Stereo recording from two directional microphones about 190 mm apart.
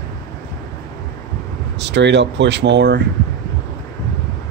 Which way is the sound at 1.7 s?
65° right (ahead or behind).